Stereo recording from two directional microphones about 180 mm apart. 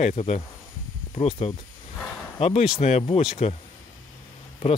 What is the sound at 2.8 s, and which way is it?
Speech, 40° left (ahead or behind).